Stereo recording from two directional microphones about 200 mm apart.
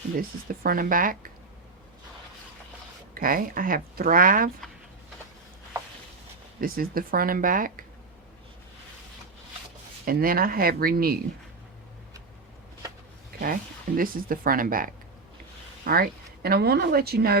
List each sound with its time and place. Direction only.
0.2 s speech: 45° right (ahead or behind)
3.2 s speech: 45° right (ahead or behind)
6.6 s speech: 45° right (ahead or behind)
10.1 s speech: 45° right (ahead or behind)
13.4 s speech: 45° right (ahead or behind)